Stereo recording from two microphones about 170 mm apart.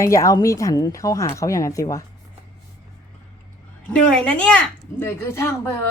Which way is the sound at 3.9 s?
5° left (ahead or behind).